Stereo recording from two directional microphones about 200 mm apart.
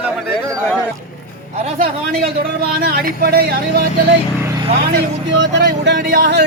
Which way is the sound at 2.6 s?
50° right (ahead or behind).